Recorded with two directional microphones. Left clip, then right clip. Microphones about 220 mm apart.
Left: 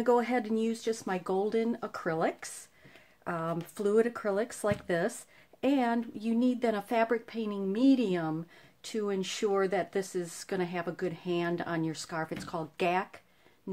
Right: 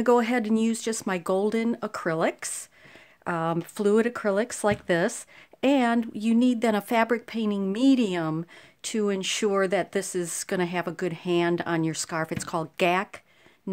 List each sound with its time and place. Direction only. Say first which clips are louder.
0.0 s speech: right 5 dB; 45° right (ahead or behind)